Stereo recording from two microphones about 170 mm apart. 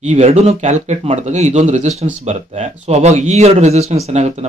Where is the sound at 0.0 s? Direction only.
40° right (ahead or behind).